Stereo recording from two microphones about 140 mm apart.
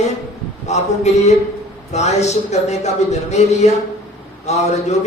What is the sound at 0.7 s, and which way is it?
A man's voice, 55° left (ahead or behind).